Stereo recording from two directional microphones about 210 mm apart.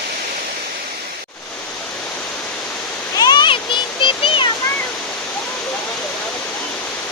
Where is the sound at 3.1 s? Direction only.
20° left (ahead or behind).